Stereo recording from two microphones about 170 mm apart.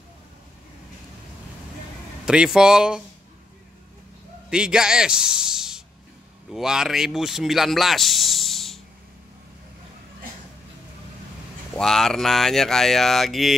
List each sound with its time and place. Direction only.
2.2 s speech: 5° right (ahead or behind)
4.5 s speech: 5° right (ahead or behind)
11.7 s speech: 5° left (ahead or behind)